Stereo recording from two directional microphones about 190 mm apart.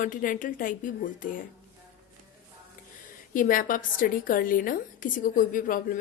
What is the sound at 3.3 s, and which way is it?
A woman's voice, 45° left (ahead or behind).